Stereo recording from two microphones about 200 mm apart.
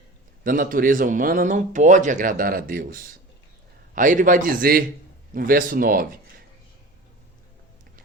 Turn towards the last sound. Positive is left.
turn(degrees=-45)  # may be behind; listen again after turning